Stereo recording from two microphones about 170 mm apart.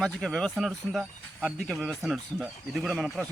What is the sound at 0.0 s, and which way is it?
Speech, 5° left (ahead or behind).